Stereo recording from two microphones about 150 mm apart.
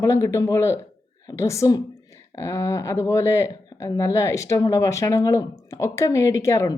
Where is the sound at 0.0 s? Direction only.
20° left (ahead or behind).